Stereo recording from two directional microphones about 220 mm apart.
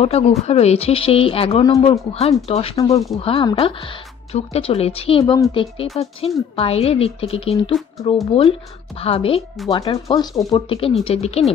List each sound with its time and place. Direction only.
0.0 s speech: 30° left (ahead or behind)